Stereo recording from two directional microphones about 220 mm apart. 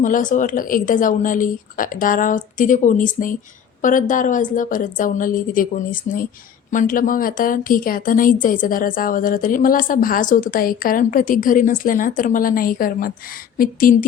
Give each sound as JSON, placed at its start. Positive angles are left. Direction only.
{"t": 0.0, "sound": "a woman's voice", "side_deg": 35}